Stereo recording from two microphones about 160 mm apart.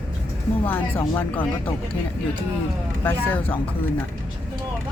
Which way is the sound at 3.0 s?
10° left (ahead or behind).